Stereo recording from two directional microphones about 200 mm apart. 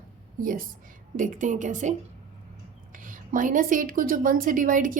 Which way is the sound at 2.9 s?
40° right (ahead or behind).